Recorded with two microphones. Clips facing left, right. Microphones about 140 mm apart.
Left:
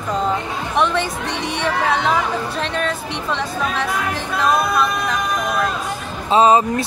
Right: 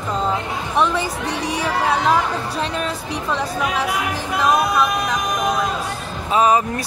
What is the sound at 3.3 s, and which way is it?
Speech, 5° right (ahead or behind).